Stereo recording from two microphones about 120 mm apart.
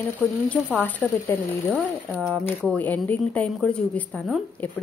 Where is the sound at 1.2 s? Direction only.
15° left (ahead or behind).